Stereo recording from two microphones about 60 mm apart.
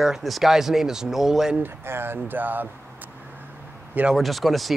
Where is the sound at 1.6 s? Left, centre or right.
Right.